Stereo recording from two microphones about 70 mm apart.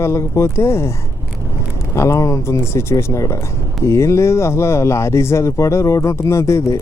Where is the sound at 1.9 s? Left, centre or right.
Left.